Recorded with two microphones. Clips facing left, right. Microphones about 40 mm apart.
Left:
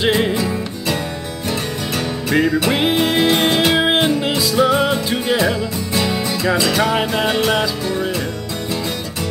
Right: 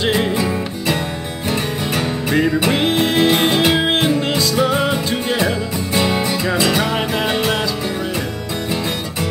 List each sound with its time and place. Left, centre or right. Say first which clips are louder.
0.0 s music: left 1 dB; centre
0.4 s music: right 1 dB; centre
5.9 s music: right 2 dB; centre
6.8 s music: left 2 dB; centre